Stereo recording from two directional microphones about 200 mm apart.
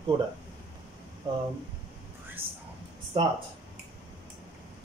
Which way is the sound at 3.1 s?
25° right (ahead or behind).